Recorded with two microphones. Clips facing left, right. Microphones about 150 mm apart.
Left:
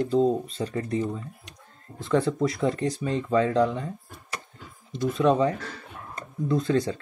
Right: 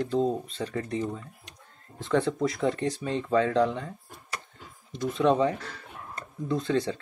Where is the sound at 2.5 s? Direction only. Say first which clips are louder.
Left 2 dB; 35° left (ahead or behind).